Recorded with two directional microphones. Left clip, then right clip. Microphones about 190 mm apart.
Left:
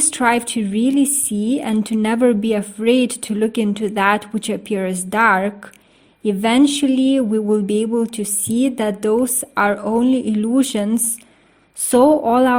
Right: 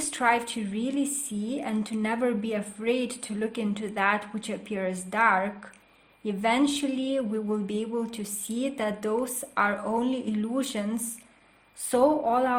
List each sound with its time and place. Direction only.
0.0 s a woman's voice: 40° left (ahead or behind)